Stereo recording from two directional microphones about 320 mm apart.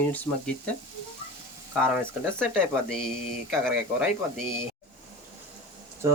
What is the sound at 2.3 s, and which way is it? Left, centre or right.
Speech, centre.